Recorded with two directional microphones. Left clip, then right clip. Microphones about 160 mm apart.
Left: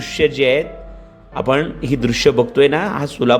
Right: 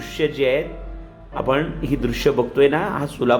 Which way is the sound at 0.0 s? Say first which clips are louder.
Left 5 dB; 40° left (ahead or behind).